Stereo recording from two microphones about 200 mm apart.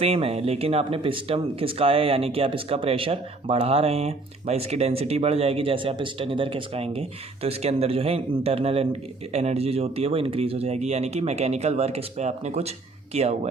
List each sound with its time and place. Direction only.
0.0 s speech: 30° right (ahead or behind)